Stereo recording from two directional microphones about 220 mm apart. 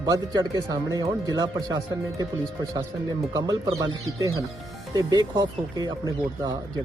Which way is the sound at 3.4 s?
15° right (ahead or behind).